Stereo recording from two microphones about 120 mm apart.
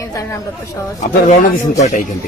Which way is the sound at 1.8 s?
90° left.